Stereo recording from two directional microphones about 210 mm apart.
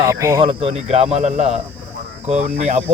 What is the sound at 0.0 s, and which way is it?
Speech, 15° right (ahead or behind).